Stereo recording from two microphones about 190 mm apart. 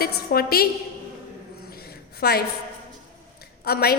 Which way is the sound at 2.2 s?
55° left (ahead or behind).